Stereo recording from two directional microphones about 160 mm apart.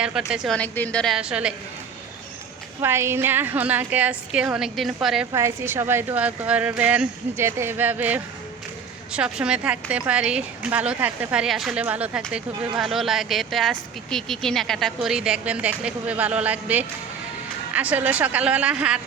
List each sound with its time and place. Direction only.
0.0 s a woman's voice: 5° right (ahead or behind)
2.8 s speech: 15° right (ahead or behind)
5.3 s speech: 15° right (ahead or behind)